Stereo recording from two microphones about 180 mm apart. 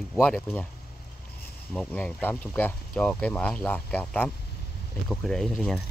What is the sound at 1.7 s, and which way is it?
Speech, 5° left (ahead or behind).